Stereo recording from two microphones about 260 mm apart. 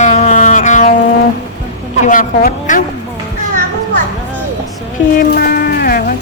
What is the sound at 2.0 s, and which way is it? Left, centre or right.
Speech, left.